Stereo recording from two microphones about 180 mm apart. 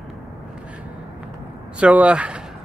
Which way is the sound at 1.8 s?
5° right (ahead or behind).